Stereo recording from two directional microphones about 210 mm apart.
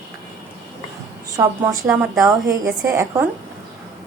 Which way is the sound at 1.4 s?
15° right (ahead or behind).